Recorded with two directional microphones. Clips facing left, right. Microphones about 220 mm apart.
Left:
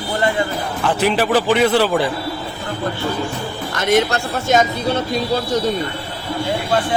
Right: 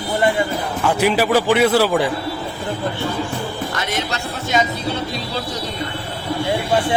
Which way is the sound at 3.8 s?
50° left (ahead or behind).